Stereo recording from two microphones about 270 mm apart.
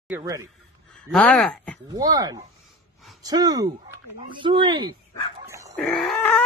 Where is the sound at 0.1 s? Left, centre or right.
Centre.